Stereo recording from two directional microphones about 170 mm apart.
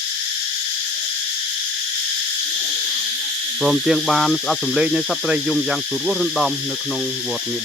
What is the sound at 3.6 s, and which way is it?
Speech, 5° right (ahead or behind).